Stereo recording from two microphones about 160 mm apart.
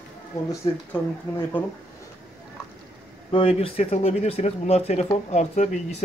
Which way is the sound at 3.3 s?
35° left (ahead or behind).